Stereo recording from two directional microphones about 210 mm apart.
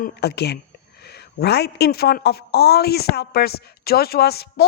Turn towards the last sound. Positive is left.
turn(degrees=50)  # may be behind; listen again after turning